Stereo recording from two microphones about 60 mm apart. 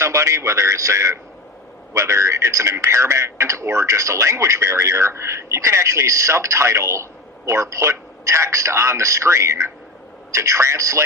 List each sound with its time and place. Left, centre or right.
0.0 s a man's voice: right